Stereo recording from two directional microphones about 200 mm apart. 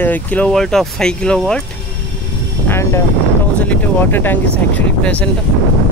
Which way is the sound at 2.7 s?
15° left (ahead or behind).